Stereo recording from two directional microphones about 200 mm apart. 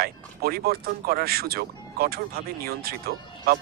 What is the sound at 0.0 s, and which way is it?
Speech, 50° right (ahead or behind).